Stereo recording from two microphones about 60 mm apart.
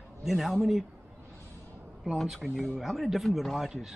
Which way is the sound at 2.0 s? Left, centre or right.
Centre.